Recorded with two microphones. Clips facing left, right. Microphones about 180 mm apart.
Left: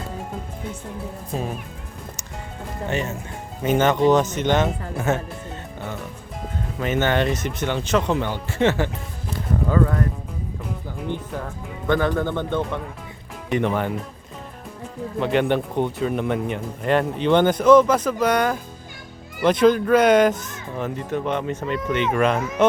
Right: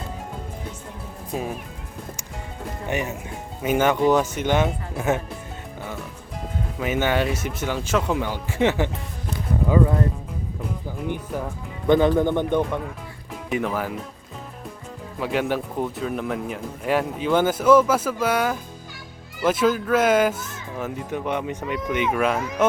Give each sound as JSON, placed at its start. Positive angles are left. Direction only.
{"t": 1.3, "sound": "speech", "side_deg": -5}
{"t": 2.9, "sound": "speech", "side_deg": -15}
{"t": 6.7, "sound": "speech", "side_deg": -10}
{"t": 11.9, "sound": "speech", "side_deg": -20}
{"t": 13.5, "sound": "speech", "side_deg": 0}
{"t": 15.2, "sound": "speech", "side_deg": -5}